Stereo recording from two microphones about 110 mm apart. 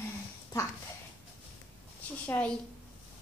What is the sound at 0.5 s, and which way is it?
Speech, 35° left (ahead or behind).